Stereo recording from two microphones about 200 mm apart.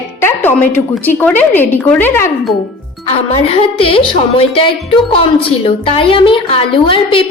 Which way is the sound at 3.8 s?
25° left (ahead or behind).